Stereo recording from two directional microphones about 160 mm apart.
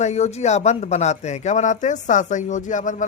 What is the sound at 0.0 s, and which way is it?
Speech, 45° left (ahead or behind).